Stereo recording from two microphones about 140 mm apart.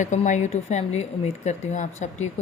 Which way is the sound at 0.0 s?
60° left (ahead or behind).